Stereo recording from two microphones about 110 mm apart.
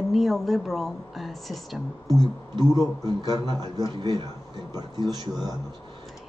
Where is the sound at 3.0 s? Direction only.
40° right (ahead or behind).